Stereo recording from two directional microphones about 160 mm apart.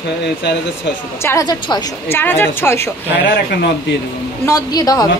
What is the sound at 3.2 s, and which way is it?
Speech, 90° left.